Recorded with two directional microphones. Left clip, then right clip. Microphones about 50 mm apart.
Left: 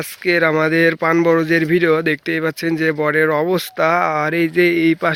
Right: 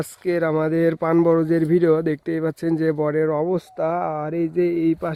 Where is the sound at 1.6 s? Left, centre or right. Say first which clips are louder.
Left 3 dB; right.